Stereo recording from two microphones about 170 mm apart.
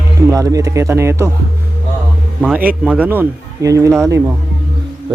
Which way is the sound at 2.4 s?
10° right (ahead or behind).